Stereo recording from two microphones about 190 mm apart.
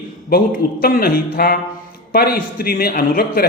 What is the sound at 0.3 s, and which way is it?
Speech, 50° left (ahead or behind).